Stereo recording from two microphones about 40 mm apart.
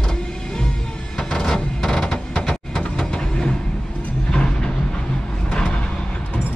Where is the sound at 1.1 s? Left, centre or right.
Centre.